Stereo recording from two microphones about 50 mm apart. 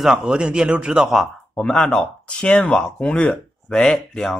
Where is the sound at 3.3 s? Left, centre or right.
Centre.